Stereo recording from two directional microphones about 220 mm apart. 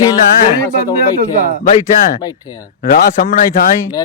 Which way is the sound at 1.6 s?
35° left (ahead or behind).